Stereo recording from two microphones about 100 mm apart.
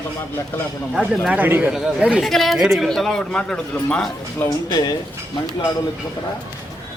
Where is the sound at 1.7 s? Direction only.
5° right (ahead or behind).